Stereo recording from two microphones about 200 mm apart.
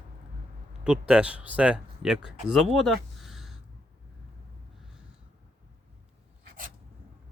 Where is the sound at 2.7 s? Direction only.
Centre (ahead or behind).